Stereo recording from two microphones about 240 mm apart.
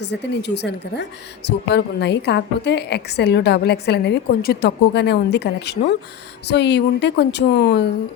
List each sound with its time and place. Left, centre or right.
0.0 s a woman's voice: left